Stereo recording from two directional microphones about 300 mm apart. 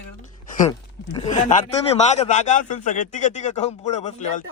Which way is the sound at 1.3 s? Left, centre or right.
Left.